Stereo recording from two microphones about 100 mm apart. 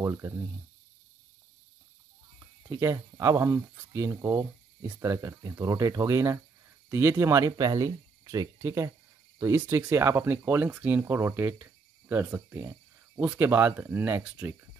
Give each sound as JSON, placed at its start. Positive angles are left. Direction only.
{"t": 0.0, "sound": "speech", "side_deg": -25}
{"t": 2.7, "sound": "speech", "side_deg": -30}